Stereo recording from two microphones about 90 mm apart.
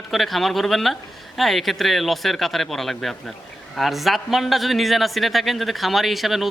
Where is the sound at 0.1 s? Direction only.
Centre (ahead or behind).